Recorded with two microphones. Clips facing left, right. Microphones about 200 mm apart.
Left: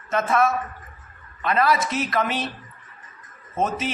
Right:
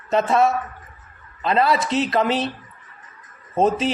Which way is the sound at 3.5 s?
35° right (ahead or behind).